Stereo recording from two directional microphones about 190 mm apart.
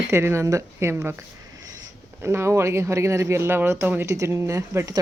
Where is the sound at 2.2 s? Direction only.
15° right (ahead or behind).